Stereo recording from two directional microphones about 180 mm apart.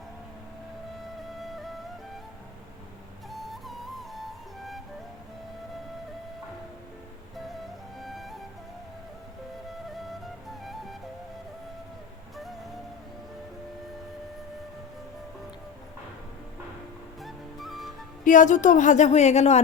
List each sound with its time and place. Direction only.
1.4 s music: centre (ahead or behind)
3.2 s music: centre (ahead or behind)
7.9 s music: centre (ahead or behind)
9.6 s music: centre (ahead or behind)
17.2 s music: centre (ahead or behind)
18.3 s speech: 45° left (ahead or behind)